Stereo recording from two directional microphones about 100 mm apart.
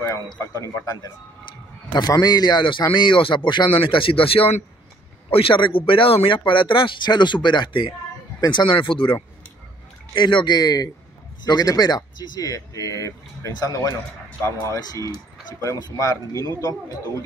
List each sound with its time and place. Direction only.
0.6 s speech: 35° left (ahead or behind)